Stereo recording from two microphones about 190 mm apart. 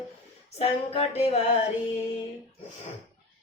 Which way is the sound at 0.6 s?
30° left (ahead or behind).